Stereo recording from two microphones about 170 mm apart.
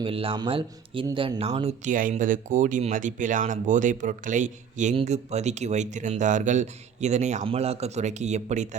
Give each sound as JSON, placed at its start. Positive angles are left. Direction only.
{"t": 0.0, "sound": "speech", "side_deg": -35}